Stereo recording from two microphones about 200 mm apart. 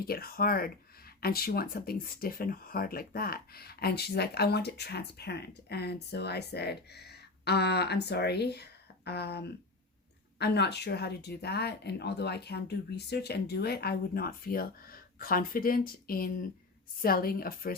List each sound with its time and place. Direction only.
0.1 s speech: 50° left (ahead or behind)